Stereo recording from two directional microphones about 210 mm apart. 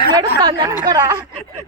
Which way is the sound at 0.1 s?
20° right (ahead or behind).